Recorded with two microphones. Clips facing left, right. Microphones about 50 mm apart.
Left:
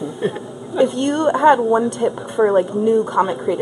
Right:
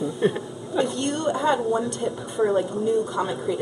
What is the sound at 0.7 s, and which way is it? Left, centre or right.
A woman's voice, left.